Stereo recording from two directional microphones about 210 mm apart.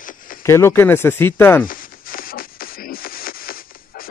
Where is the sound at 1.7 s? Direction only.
40° left (ahead or behind).